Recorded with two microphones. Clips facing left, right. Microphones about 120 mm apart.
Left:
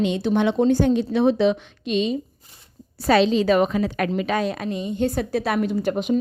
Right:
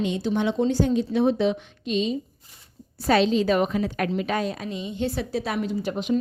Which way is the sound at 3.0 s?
90° left.